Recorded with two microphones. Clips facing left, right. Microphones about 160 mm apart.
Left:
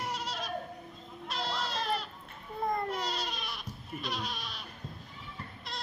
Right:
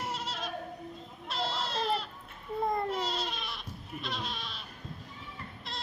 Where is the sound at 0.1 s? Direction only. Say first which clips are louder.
Even; 5° right (ahead or behind).